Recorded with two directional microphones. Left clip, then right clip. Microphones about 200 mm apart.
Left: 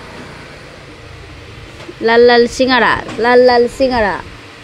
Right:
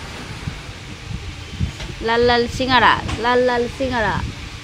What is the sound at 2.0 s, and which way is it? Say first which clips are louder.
A woman's voice: left 8 dB; 35° left (ahead or behind).